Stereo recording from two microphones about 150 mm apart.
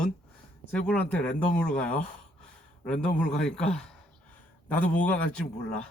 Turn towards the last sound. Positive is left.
turn(degrees=5)  # may be behind; listen again after turning